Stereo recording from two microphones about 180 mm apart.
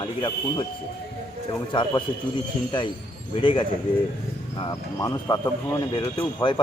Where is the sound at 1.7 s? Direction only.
25° left (ahead or behind).